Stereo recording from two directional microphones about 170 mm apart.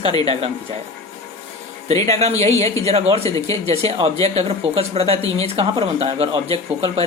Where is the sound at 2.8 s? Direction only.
35° right (ahead or behind).